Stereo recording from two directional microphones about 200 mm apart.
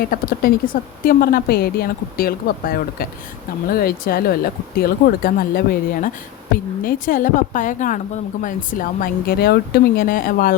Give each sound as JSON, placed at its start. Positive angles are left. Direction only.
{"t": 0.0, "sound": "speech", "side_deg": 45}